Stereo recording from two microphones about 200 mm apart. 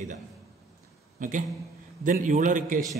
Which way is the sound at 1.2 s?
45° right (ahead or behind).